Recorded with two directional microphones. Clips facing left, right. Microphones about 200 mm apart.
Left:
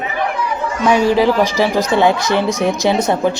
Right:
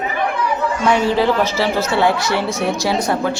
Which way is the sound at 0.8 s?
15° left (ahead or behind).